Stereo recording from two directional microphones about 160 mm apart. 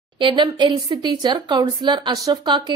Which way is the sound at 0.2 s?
30° right (ahead or behind).